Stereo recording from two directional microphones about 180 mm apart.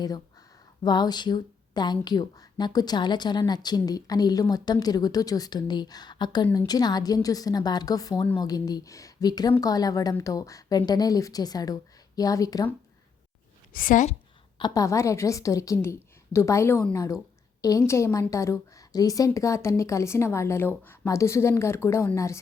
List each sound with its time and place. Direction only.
0.8 s speech: 25° left (ahead or behind)
13.7 s a woman's voice: 50° left (ahead or behind)
14.6 s a woman's voice: 20° left (ahead or behind)